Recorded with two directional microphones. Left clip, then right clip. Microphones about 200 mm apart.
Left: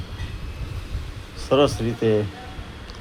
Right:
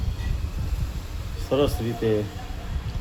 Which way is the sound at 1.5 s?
25° left (ahead or behind).